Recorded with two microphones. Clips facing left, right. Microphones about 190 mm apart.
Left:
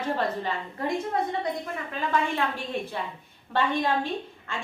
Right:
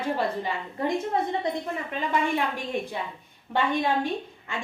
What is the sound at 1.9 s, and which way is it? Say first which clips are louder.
Speech: right 1 dB; 15° right (ahead or behind).